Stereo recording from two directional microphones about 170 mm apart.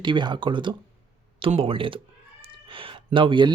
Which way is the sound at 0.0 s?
25° right (ahead or behind).